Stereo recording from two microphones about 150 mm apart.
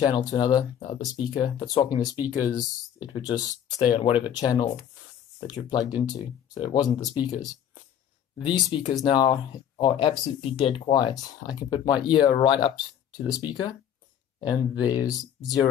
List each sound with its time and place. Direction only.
0.0 s speech: 25° left (ahead or behind)
8.9 s speech: 30° left (ahead or behind)